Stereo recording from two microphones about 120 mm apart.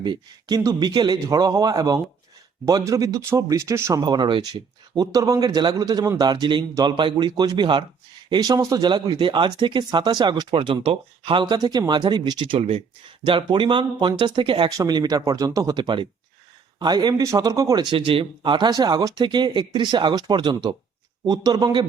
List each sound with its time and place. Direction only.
0.0 s speech: 35° right (ahead or behind)
4.0 s speech: 35° right (ahead or behind)
17.9 s speech: 50° right (ahead or behind)